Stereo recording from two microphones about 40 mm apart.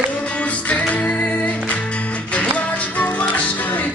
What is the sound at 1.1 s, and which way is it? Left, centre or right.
Singing, left.